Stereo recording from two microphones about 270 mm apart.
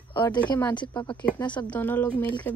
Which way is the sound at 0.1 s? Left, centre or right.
Centre.